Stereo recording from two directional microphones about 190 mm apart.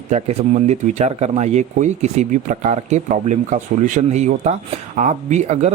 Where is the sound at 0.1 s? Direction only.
35° right (ahead or behind).